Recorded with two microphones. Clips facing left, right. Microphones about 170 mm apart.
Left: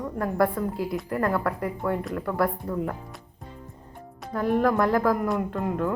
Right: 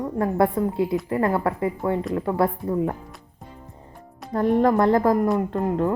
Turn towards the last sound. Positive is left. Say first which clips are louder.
# right 4 dB
turn(degrees=-20)  # may be behind; listen again after turning